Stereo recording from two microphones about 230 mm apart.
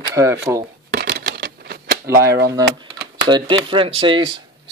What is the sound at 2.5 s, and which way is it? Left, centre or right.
Speech, centre.